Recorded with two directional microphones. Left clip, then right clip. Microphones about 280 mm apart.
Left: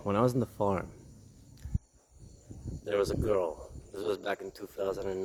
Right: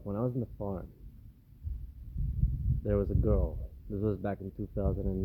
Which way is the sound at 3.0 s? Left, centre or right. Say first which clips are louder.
Left 4 dB; centre.